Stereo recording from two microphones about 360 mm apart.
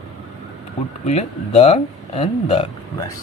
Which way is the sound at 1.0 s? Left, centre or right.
Centre.